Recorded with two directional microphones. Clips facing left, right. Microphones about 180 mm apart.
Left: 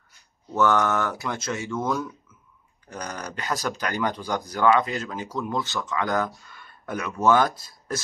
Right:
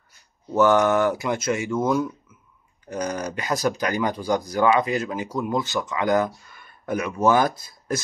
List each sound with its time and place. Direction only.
0.6 s speech: 15° right (ahead or behind)
6.4 s a sound: 15° right (ahead or behind)
7.2 s speech: 15° right (ahead or behind)